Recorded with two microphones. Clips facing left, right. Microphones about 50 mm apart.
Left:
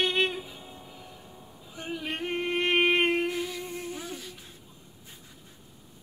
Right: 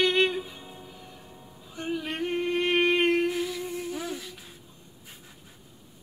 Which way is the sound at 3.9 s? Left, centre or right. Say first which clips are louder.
Right 4 dB; right.